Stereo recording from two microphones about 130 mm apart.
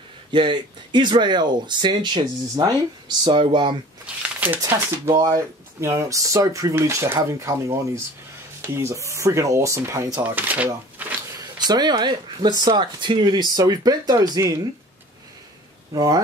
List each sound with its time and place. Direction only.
0.3 s speech: 35° right (ahead or behind)
4.0 s shuffling cards: 15° right (ahead or behind)
4.6 s speech: 20° right (ahead or behind)
10.2 s speech: 15° right (ahead or behind)
11.3 s speech: 30° right (ahead or behind)
15.9 s speech: 30° right (ahead or behind)